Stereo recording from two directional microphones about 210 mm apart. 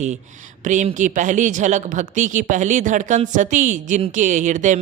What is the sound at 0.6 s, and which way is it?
A woman's voice, 35° right (ahead or behind).